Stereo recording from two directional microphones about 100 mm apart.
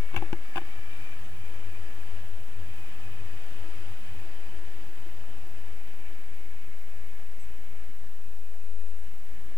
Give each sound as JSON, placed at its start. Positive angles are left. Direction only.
{"t": 0.1, "sound": "insect", "side_deg": 35}